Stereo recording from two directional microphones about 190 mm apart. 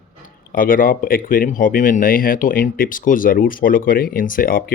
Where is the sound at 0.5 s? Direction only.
45° left (ahead or behind).